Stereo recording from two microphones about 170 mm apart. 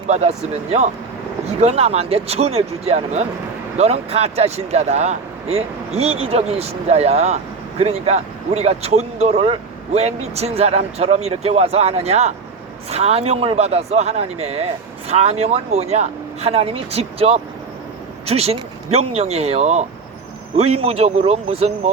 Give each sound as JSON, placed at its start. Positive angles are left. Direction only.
{"t": 0.1, "sound": "speech", "side_deg": -40}